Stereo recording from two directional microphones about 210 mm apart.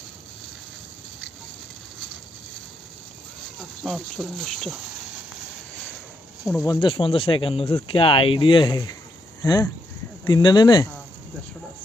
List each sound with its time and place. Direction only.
3.8 s speech: centre (ahead or behind)
6.6 s speech: 20° left (ahead or behind)